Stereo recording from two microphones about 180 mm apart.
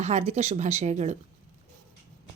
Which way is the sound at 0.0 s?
35° right (ahead or behind).